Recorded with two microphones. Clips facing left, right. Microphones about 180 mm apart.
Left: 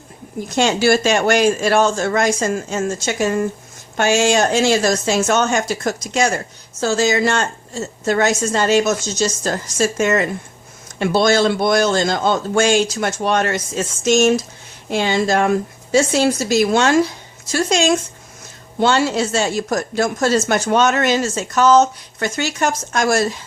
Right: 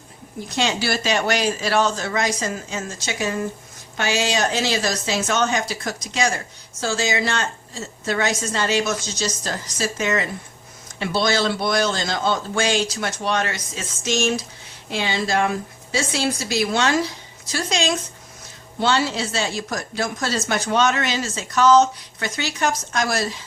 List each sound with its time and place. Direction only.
0.4 s speech: 45° left (ahead or behind)